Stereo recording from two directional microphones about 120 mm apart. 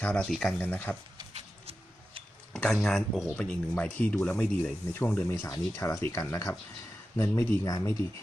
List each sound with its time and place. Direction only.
0.0 s speech: 5° left (ahead or behind)
0.6 s speech: 15° left (ahead or behind)
1.3 s a sound: 60° right (ahead or behind)
2.5 s speech: 5° left (ahead or behind)
5.3 s speech: 25° left (ahead or behind)